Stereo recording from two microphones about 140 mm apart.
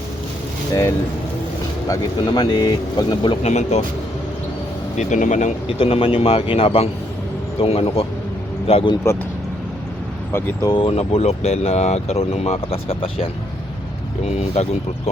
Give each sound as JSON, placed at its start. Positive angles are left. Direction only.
{"t": 0.7, "sound": "speech", "side_deg": 20}
{"t": 3.4, "sound": "speech", "side_deg": 50}
{"t": 4.9, "sound": "speech", "side_deg": 60}
{"t": 5.6, "sound": "speech", "side_deg": 40}
{"t": 10.3, "sound": "speech", "side_deg": 15}
{"t": 10.7, "sound": "speech", "side_deg": 40}
{"t": 14.3, "sound": "speech", "side_deg": 50}